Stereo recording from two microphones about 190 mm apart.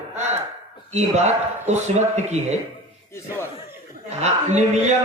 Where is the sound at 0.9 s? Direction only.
35° right (ahead or behind).